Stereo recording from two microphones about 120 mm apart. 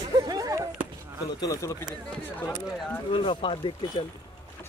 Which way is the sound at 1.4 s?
25° left (ahead or behind).